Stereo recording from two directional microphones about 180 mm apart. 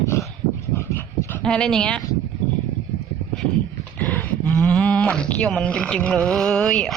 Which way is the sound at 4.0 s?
10° left (ahead or behind).